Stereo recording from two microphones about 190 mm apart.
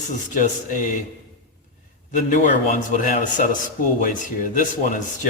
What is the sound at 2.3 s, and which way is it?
A man's voice, 45° left (ahead or behind).